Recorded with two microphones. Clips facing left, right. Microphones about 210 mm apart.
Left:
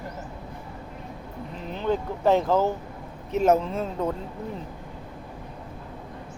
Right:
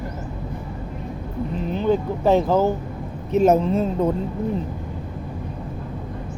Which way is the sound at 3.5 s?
25° right (ahead or behind).